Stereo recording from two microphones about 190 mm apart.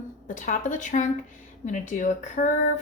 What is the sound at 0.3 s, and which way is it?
A woman's voice, 40° left (ahead or behind).